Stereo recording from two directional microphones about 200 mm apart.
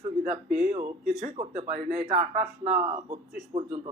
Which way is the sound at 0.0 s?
35° right (ahead or behind).